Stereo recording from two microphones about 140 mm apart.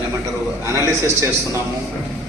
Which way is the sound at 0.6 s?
20° right (ahead or behind).